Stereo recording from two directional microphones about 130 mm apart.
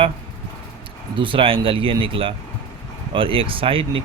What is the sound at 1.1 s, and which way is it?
Speech, 40° right (ahead or behind).